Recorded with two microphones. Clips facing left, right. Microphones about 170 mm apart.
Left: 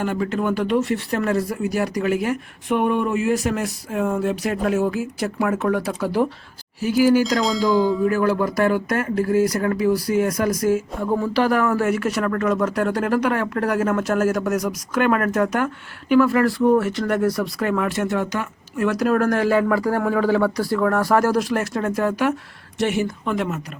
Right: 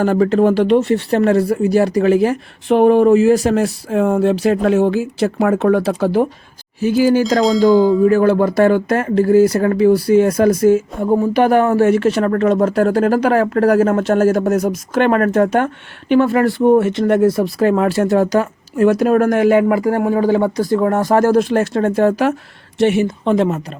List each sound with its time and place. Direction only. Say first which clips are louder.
0.0 s speech: right 10 dB; 35° right (ahead or behind)
7.3 s a sound: right 7 dB; centre (ahead or behind)
8.0 s speech: right 7 dB; 25° right (ahead or behind)